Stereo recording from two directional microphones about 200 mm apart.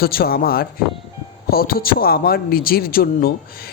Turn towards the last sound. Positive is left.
turn(degrees=45)  # may be behind; listen again after turning